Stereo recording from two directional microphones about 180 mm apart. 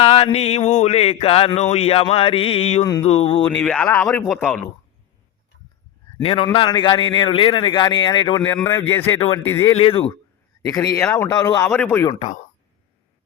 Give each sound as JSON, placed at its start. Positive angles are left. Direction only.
{"t": 0.0, "sound": "a sound", "side_deg": 35}
{"t": 3.4, "sound": "speech", "side_deg": 5}
{"t": 6.2, "sound": "speech", "side_deg": 30}
{"t": 8.6, "sound": "speech", "side_deg": 15}
{"t": 9.7, "sound": "a sound", "side_deg": 30}
{"t": 11.0, "sound": "speech", "side_deg": 15}